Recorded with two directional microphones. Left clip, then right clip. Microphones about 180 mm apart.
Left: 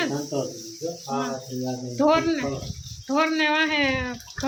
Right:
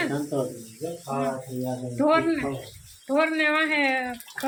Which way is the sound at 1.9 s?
5° left (ahead or behind).